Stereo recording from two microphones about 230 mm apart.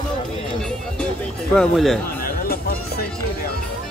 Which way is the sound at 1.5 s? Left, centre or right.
Centre.